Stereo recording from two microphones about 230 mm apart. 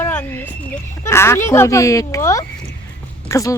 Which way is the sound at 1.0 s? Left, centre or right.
Centre.